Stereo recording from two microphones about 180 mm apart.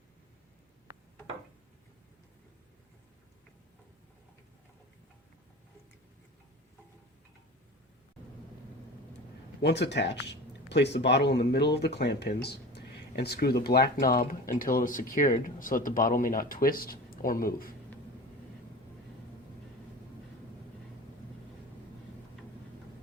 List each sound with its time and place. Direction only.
9.6 s speech: 70° left (ahead or behind); by 17.7 s 55° left (ahead or behind)